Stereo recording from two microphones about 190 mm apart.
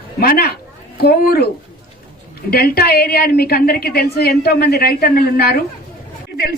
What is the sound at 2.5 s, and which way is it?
A woman's voice, 55° left (ahead or behind).